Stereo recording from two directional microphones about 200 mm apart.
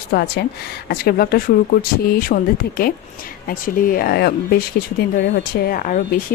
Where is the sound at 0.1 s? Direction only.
50° left (ahead or behind).